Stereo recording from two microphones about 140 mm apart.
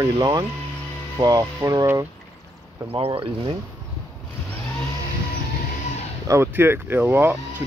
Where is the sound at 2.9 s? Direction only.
40° right (ahead or behind).